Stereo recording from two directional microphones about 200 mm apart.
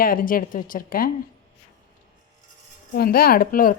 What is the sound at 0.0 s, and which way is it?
Speech, 45° left (ahead or behind).